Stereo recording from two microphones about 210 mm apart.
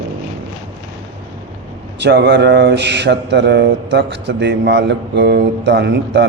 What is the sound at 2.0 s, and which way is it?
Mantra, 55° right (ahead or behind).